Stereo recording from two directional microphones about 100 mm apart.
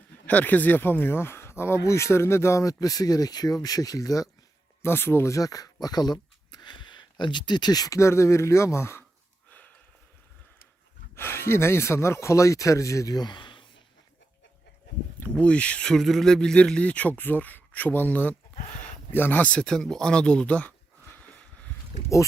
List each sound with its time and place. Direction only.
0.3 s speech: 15° left (ahead or behind); by 4.3 s 35° left (ahead or behind)
4.8 s speech: 20° left (ahead or behind)
11.1 s speech: 25° left (ahead or behind); by 13.7 s 55° left (ahead or behind)
15.2 s speech: 10° left (ahead or behind)